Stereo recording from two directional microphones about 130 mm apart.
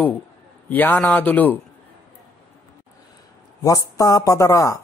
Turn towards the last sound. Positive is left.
turn(degrees=25)  # may be behind; listen again after turning